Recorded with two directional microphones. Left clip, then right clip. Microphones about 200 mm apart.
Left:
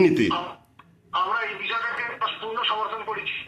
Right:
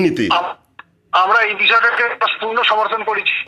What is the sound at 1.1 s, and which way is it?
A man's voice, 45° right (ahead or behind).